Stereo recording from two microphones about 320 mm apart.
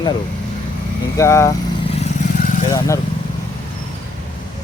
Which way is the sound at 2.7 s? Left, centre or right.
Centre.